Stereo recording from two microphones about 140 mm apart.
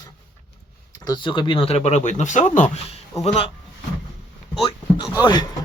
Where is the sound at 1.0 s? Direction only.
30° left (ahead or behind); by 3.5 s 45° left (ahead or behind).